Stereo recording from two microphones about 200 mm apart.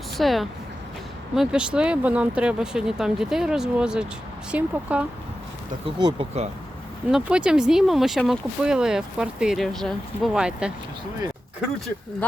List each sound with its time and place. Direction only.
0.2 s speech: centre (ahead or behind)
5.8 s speech: 25° right (ahead or behind)
7.1 s speech: 5° right (ahead or behind)